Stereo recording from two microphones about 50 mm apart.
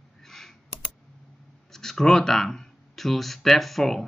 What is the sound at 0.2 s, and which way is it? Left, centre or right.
Computer keyboard, centre.